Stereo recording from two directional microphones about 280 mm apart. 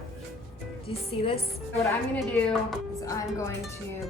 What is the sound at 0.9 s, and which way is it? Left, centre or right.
Speech, left.